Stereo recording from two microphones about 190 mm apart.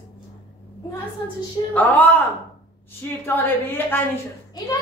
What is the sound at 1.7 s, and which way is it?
A man's voice, 10° left (ahead or behind).